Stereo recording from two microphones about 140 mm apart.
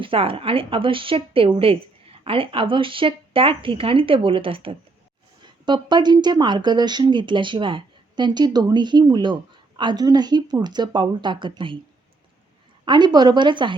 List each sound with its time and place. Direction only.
0.0 s speech: 40° right (ahead or behind)
12.8 s speech: 30° right (ahead or behind)